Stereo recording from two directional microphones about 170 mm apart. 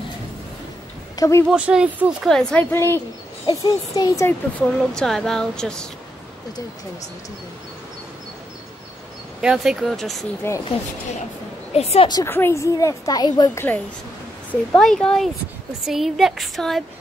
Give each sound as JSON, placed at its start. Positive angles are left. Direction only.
{"t": 1.1, "sound": "a sound", "side_deg": 20}
{"t": 1.5, "sound": "speech", "side_deg": -5}
{"t": 2.7, "sound": "a woman's voice", "side_deg": 15}
{"t": 4.7, "sound": "speech", "side_deg": 0}
{"t": 9.4, "sound": "speech", "side_deg": -5}
{"t": 10.4, "sound": "speech", "side_deg": 15}
{"t": 11.7, "sound": "a woman's voice", "side_deg": 35}
{"t": 12.1, "sound": "a woman's voice", "side_deg": 20}
{"t": 14.8, "sound": "speech", "side_deg": 5}